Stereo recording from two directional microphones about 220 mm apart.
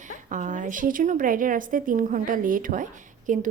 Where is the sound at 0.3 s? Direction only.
35° right (ahead or behind).